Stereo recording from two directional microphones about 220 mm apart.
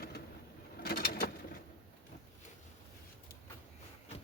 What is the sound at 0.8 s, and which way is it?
Bird, 45° left (ahead or behind).